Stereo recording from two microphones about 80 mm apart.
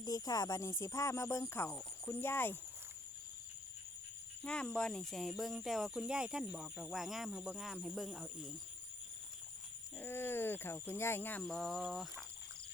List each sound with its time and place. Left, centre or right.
0.0 s speech: left
4.4 s speech: centre
10.0 s speech: left
11.4 s speech: centre